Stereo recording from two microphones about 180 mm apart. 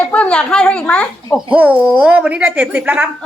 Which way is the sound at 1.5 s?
10° right (ahead or behind).